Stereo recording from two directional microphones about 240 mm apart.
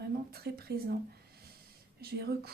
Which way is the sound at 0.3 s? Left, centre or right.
Right.